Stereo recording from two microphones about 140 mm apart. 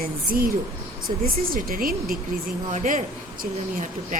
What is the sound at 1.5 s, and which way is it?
Speech, 90° right.